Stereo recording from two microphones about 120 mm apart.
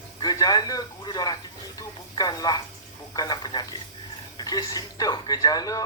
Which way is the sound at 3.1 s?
35° left (ahead or behind).